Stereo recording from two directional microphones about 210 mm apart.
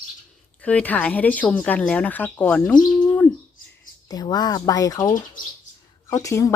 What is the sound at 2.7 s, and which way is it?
Bird, 15° left (ahead or behind).